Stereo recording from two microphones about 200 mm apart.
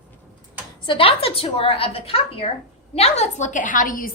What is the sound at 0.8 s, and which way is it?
A woman's voice, 25° left (ahead or behind).